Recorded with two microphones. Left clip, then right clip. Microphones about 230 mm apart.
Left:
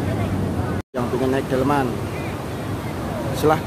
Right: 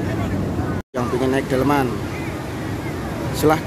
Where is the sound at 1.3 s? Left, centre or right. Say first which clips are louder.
Right 2 dB; centre.